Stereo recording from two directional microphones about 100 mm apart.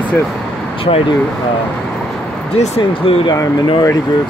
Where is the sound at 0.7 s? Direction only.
65° left (ahead or behind).